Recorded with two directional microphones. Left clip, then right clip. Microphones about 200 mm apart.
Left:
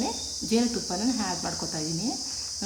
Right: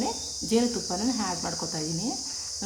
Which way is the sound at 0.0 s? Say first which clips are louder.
Even; centre (ahead or behind).